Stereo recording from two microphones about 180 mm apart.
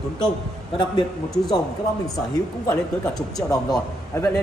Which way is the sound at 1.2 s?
5° left (ahead or behind).